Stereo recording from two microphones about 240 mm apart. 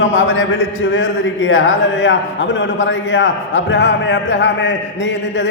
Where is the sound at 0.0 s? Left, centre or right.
Left.